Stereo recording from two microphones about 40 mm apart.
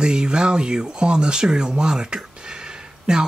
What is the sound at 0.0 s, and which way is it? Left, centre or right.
Speech, right.